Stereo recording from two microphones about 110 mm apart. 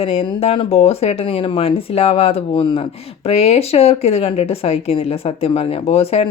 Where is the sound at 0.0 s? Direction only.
60° left (ahead or behind).